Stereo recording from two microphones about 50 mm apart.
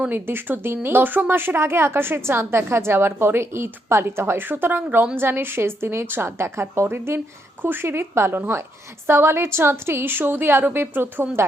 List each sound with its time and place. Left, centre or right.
0.1 s a woman's voice: right